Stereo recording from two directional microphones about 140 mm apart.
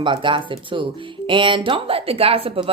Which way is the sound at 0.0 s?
35° right (ahead or behind).